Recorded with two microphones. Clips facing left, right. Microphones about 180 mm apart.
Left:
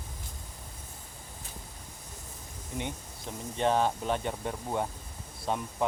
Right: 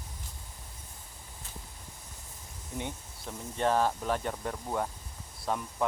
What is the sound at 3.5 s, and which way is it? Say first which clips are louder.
Speech: left 1 dB; 20° left (ahead or behind).